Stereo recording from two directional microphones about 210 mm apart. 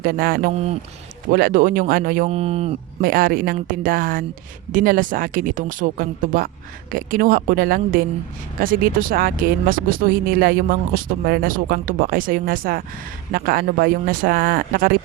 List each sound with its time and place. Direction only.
0.0 s speech: 45° right (ahead or behind)
0.5 s speech: 30° right (ahead or behind)
1.3 s speech: 45° right (ahead or behind)
2.3 s speech: 30° right (ahead or behind)
3.0 s speech: 45° right (ahead or behind)